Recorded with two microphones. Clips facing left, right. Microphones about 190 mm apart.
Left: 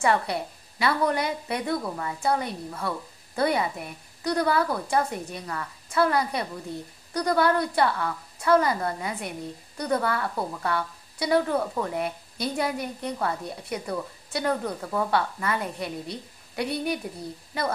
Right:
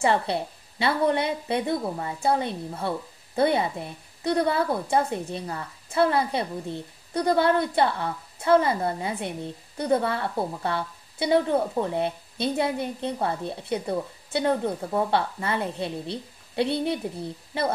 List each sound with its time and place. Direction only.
0.0 s a woman's voice: 25° right (ahead or behind)